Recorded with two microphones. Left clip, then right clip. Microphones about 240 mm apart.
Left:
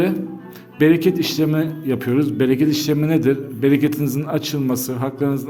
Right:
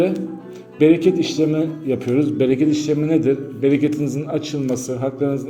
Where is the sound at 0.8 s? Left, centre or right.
Left.